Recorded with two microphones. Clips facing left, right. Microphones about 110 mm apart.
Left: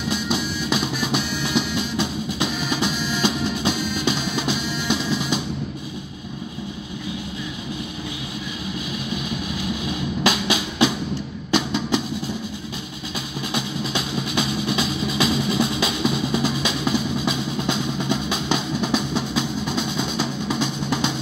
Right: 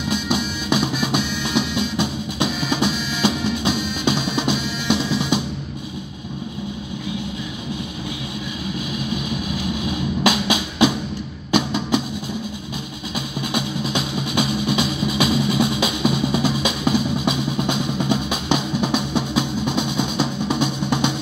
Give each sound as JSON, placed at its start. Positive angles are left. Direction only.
{"t": 0.3, "sound": "music", "side_deg": -20}
{"t": 9.8, "sound": "music", "side_deg": -20}
{"t": 13.5, "sound": "music", "side_deg": -15}